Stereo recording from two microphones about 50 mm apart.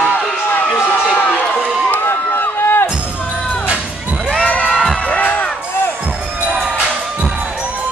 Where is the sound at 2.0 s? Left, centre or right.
Left.